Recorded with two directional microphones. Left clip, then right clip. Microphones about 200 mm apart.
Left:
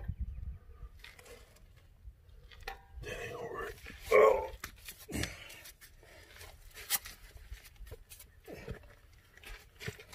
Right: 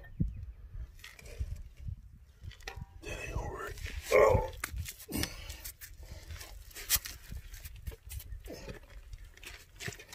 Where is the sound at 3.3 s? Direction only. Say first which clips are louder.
Left 2 dB; 25° right (ahead or behind).